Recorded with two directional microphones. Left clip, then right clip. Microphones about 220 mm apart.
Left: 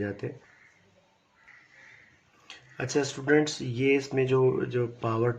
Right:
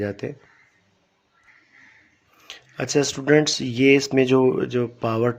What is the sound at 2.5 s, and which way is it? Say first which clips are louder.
Speech: right 6 dB; 50° right (ahead or behind).